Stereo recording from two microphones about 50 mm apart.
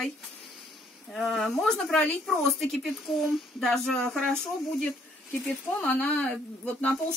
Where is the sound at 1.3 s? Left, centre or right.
Centre.